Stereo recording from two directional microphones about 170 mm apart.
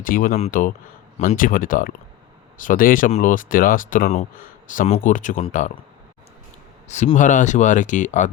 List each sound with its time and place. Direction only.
0.0 s speech: 55° left (ahead or behind)
0.3 s speech: 45° left (ahead or behind)
6.8 s speech: 45° left (ahead or behind)